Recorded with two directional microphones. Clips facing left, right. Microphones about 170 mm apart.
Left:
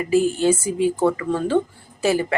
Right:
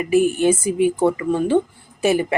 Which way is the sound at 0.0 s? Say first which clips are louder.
Right 2 dB; 15° right (ahead or behind).